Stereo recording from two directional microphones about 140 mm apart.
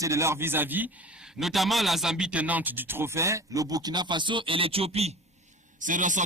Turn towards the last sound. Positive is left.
turn(degrees=-65)  # may be behind; listen again after turning